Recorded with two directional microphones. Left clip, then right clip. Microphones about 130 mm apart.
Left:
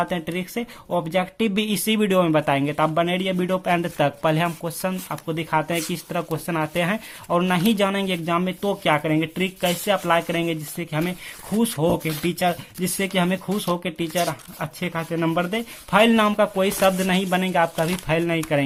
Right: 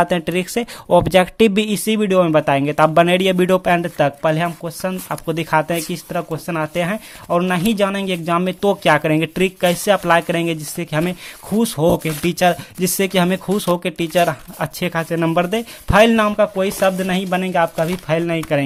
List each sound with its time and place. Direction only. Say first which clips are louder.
0.0 s speech: right 8 dB; 40° right (ahead or behind)
1.6 s speech: right 3 dB; 30° right (ahead or behind); by 3.7 s 45° right (ahead or behind)
3.7 s speech: right 5 dB; 25° right (ahead or behind)
5.1 s speech: right 7 dB; 40° right (ahead or behind)
16.2 s speech: right 3 dB; 15° right (ahead or behind)